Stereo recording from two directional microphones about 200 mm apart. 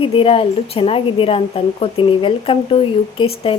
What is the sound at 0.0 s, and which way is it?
Speech, 25° left (ahead or behind).